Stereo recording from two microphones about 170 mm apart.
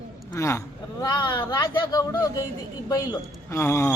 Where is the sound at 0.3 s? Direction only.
15° left (ahead or behind).